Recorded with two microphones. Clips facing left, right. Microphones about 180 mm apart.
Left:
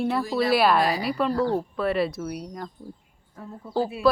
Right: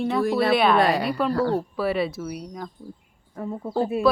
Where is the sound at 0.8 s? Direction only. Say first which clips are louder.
Right 3 dB; 65° right (ahead or behind).